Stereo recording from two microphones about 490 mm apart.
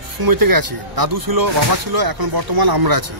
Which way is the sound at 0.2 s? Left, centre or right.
Right.